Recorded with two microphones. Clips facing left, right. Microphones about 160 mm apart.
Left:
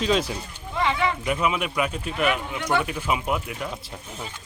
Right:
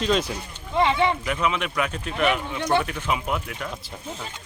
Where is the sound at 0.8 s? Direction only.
25° right (ahead or behind).